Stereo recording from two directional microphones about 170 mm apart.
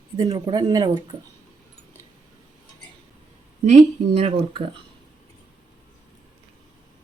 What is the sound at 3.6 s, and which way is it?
Speech, 40° right (ahead or behind).